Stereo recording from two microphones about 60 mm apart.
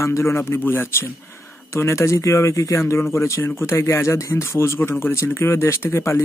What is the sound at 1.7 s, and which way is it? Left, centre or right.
Speech, left.